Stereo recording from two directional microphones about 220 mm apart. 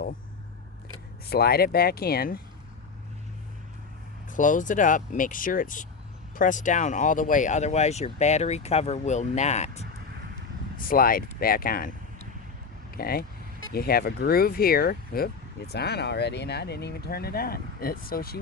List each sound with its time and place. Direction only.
1.3 s speech: 45° left (ahead or behind)
4.3 s speech: 35° left (ahead or behind)